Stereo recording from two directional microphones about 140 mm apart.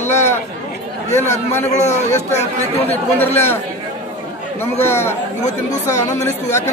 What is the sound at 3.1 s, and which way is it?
Speech, 15° left (ahead or behind).